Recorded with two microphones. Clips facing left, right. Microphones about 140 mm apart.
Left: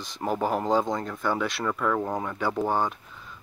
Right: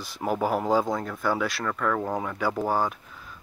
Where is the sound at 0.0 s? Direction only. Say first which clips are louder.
Right 1 dB; 5° right (ahead or behind).